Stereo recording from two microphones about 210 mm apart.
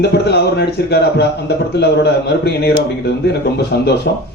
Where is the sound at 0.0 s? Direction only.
50° left (ahead or behind).